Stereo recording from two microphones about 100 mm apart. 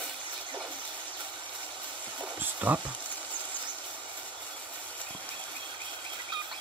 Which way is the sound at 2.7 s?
15° right (ahead or behind).